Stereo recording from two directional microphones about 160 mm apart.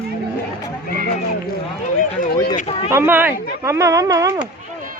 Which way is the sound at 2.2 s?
80° left.